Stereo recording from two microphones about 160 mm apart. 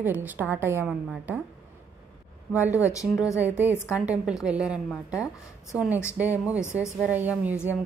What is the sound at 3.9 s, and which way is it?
Speech, 5° right (ahead or behind).